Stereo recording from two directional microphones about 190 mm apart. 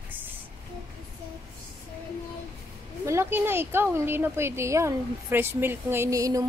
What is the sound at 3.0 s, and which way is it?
Speech, 10° right (ahead or behind).